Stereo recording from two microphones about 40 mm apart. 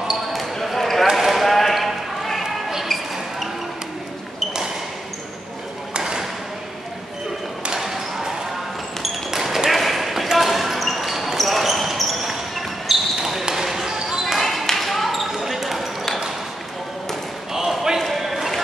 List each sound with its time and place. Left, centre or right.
0.1 s basketball bounce: centre
1.1 s clip-clop: centre
2.4 s basketball bounce: centre
5.9 s a sound: centre
7.8 s basketball bounce: centre
14.2 s basketball bounce: centre
17.6 s a sound: centre
18.0 s basketball bounce: centre